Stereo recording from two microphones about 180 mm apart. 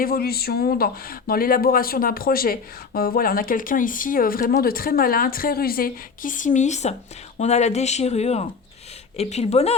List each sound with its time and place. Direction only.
0.0 s speech: 55° left (ahead or behind); by 9.7 s 35° left (ahead or behind)